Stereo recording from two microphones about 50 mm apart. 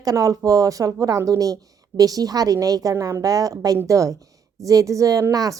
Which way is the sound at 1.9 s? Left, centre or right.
Right.